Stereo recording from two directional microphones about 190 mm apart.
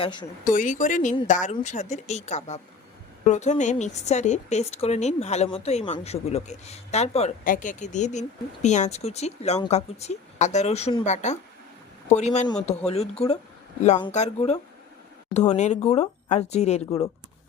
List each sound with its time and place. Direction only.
0.0 s speech: 25° left (ahead or behind)
0.4 s a woman's voice: 45° left (ahead or behind)